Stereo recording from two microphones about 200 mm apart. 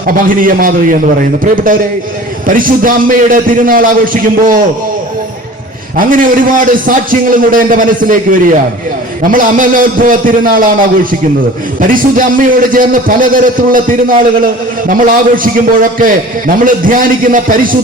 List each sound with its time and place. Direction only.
0.0 s a man's voice: 45° right (ahead or behind)
6.0 s a man's voice: 45° right (ahead or behind)